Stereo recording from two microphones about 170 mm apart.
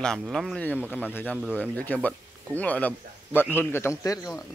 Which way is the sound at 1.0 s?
10° left (ahead or behind).